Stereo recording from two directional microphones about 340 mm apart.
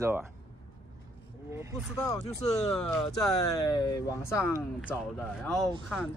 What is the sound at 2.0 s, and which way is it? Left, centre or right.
Speech, centre.